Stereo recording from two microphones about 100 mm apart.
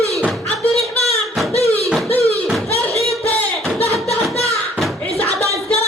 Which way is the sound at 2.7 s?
90° left.